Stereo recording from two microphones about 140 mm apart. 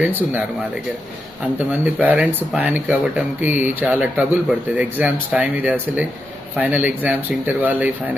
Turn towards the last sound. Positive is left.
turn(degrees=-10)  # may be behind; listen again after turning